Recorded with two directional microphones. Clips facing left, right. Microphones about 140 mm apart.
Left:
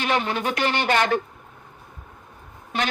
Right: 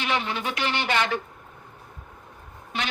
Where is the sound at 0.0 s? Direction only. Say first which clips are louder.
Left 4 dB; 45° left (ahead or behind).